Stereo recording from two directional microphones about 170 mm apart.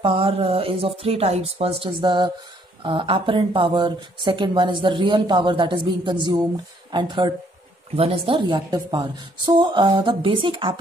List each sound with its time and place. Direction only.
0.0 s speech: 30° right (ahead or behind)